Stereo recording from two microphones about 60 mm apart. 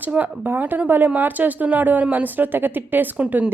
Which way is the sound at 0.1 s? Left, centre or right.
Right.